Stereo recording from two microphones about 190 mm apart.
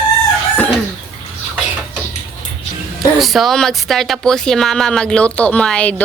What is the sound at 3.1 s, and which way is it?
Speech, centre (ahead or behind).